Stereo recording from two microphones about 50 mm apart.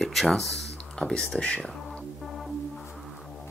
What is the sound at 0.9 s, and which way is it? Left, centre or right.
Speech, centre.